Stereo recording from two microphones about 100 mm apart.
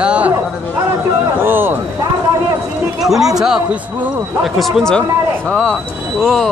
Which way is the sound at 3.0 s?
5° right (ahead or behind).